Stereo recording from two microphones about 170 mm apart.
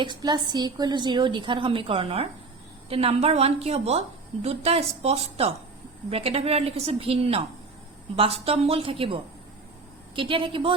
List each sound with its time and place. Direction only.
0.0 s a woman's voice: 25° right (ahead or behind)